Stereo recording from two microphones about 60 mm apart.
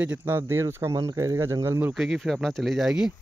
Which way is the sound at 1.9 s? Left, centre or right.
Centre.